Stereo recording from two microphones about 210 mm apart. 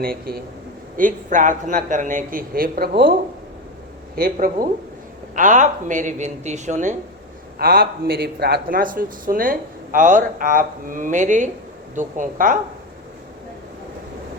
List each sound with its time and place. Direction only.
0.0 s speech: 45° right (ahead or behind)
4.1 s speech: 45° right (ahead or behind)
7.6 s speech: 50° right (ahead or behind)